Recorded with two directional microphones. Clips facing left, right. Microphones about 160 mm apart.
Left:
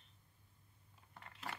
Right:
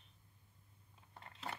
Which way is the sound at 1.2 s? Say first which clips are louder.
Right 1 dB; 25° right (ahead or behind).